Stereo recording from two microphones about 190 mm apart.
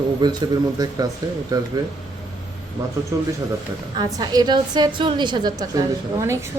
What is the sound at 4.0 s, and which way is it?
A woman's voice, 20° right (ahead or behind).